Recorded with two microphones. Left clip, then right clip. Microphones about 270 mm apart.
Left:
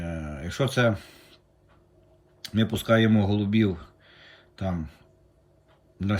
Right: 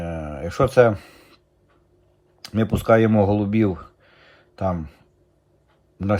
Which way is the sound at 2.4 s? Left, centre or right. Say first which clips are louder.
Right 4 dB; right.